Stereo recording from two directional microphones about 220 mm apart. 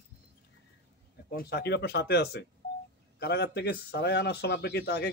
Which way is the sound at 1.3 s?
45° left (ahead or behind).